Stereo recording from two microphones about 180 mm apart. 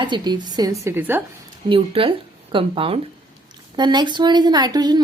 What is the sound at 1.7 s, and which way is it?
A woman's voice, 30° right (ahead or behind).